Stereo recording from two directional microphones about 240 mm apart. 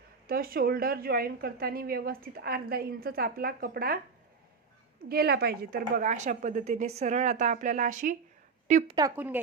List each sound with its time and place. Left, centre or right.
0.3 s speech: right
5.0 s a woman's voice: right
9.0 s speech: centre